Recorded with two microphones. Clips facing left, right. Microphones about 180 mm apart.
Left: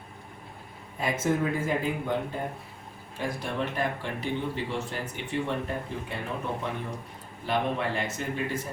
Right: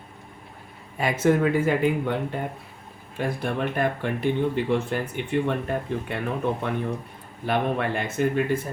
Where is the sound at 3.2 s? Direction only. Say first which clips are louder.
Right 5 dB; 55° right (ahead or behind).